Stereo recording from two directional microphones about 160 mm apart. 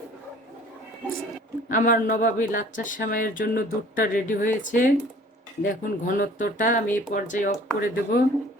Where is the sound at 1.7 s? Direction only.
55° left (ahead or behind).